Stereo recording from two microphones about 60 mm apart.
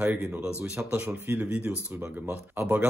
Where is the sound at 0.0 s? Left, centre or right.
Right.